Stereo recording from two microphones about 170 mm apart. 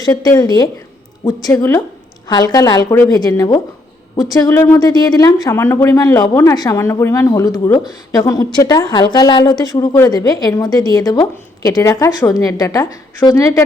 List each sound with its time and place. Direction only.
0.0 s a woman's voice: 20° left (ahead or behind)